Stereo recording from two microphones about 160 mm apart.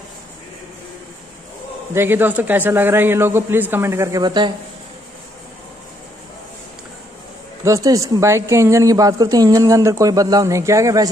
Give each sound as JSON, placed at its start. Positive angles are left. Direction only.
{"t": 2.0, "sound": "speech", "side_deg": -15}
{"t": 7.6, "sound": "a woman's voice", "side_deg": -20}